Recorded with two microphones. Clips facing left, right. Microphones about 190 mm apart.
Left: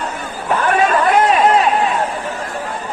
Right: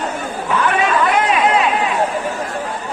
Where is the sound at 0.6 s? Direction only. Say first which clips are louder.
Left 2 dB; 40° left (ahead or behind).